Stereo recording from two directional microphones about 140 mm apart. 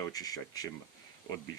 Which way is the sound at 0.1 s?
25° left (ahead or behind).